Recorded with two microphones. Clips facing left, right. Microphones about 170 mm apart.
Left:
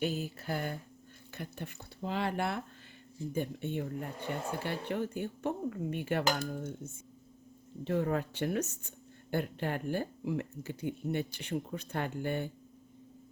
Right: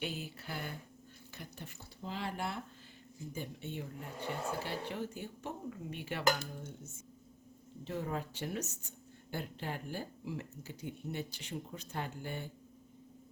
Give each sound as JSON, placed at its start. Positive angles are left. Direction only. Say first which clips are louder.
{"t": 0.0, "sound": "speech", "louder": "left 7 dB", "side_deg": 45}
{"t": 1.3, "sound": "speech", "louder": "left 7 dB", "side_deg": 60}
{"t": 3.3, "sound": "speech", "louder": "left 8 dB", "side_deg": 55}